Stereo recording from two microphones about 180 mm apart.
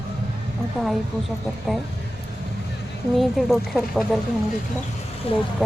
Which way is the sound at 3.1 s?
Centre (ahead or behind).